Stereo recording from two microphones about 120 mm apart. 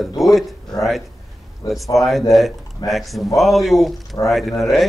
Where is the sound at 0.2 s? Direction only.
Centre (ahead or behind).